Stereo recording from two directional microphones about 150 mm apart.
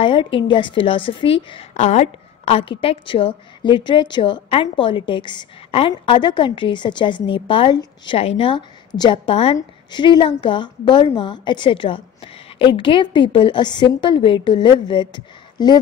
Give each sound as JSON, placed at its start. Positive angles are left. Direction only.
{"t": 0.0, "sound": "a woman's voice", "side_deg": 35}